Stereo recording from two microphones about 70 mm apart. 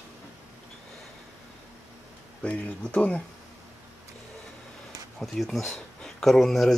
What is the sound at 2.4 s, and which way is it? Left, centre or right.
Speech, left.